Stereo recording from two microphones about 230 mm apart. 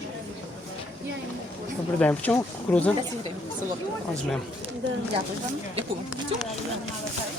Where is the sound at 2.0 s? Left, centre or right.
Centre.